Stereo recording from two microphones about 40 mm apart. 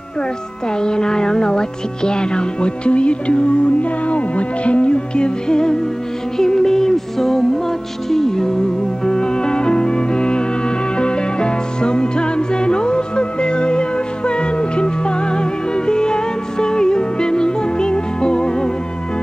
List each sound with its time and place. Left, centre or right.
0.7 s music: centre